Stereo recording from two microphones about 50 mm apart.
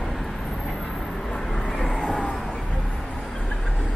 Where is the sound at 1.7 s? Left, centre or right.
Centre.